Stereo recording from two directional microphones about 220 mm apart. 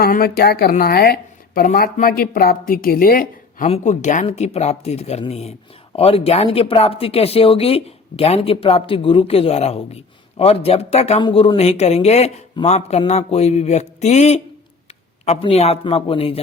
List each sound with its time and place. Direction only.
0.0 s speech: 45° left (ahead or behind); by 16.4 s 25° left (ahead or behind)